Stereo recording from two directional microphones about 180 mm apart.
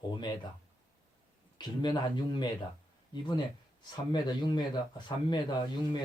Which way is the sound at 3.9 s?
25° left (ahead or behind).